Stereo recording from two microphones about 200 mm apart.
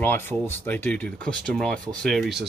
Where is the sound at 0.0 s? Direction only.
10° left (ahead or behind).